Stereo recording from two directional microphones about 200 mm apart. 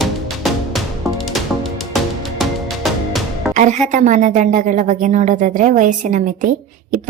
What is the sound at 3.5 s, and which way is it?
A woman's voice, 40° right (ahead or behind).